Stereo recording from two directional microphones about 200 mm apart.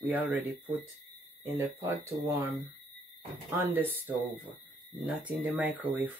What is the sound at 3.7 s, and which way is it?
Speech, 10° right (ahead or behind).